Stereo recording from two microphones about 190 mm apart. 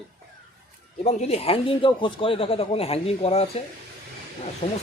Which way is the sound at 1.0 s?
35° left (ahead or behind).